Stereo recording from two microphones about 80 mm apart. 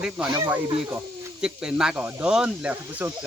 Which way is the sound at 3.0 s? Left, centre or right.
Right.